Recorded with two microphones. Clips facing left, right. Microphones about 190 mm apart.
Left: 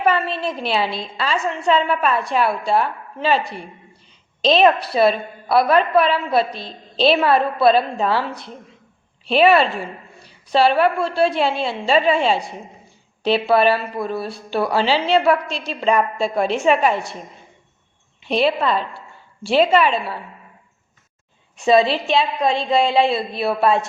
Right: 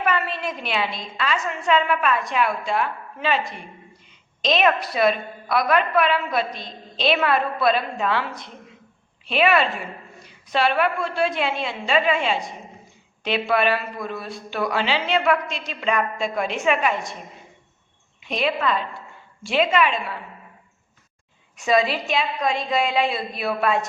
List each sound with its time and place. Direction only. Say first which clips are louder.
0.0 s a woman's voice: left 5 dB; 30° left (ahead or behind)
18.2 s a woman's voice: left 5 dB; 30° left (ahead or behind)
21.5 s a woman's voice: left 5 dB; 30° left (ahead or behind)